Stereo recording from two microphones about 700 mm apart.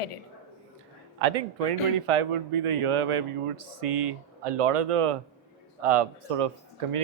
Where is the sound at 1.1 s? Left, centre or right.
Right.